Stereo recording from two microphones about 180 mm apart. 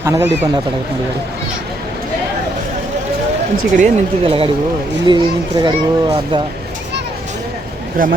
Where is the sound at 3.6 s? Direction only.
45° right (ahead or behind).